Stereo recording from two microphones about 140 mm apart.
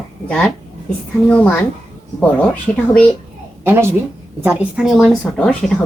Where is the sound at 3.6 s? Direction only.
15° right (ahead or behind); by 5.7 s 5° left (ahead or behind).